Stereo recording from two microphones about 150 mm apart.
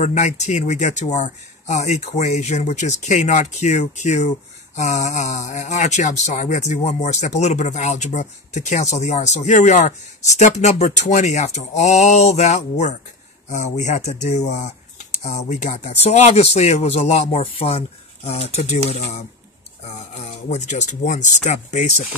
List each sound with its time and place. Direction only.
0.0 s speech: 50° left (ahead or behind)
15.2 s speech: 50° left (ahead or behind)